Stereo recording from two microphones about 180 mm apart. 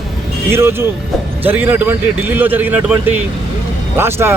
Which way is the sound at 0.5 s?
15° right (ahead or behind).